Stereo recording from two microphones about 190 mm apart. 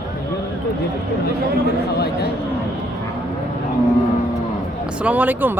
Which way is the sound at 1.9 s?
60° left (ahead or behind).